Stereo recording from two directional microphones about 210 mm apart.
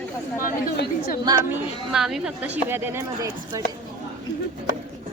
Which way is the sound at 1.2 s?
15° right (ahead or behind).